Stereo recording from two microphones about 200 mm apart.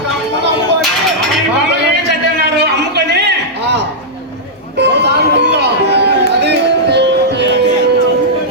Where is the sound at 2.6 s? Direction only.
55° right (ahead or behind).